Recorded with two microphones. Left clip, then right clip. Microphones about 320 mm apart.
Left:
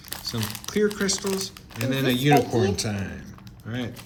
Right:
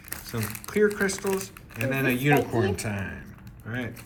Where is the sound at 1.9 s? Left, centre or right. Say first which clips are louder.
Left 3 dB; centre.